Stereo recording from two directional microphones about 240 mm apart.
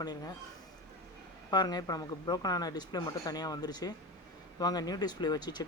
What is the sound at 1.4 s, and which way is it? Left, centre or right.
Speech, centre.